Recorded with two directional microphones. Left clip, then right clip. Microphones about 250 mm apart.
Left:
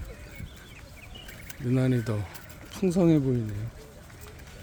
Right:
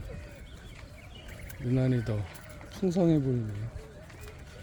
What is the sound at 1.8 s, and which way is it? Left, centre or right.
Speech, centre.